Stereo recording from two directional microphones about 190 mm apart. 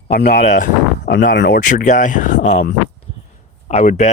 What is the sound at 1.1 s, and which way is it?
Speech, 55° left (ahead or behind).